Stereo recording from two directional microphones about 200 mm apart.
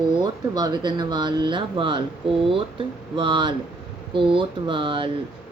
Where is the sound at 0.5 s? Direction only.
20° right (ahead or behind).